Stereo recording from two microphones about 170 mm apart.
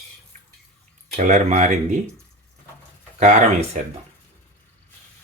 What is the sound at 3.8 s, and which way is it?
Speech, 45° right (ahead or behind).